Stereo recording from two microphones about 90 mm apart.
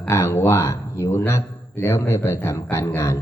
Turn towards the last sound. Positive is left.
turn(degrees=30)  # may be behind; listen again after turning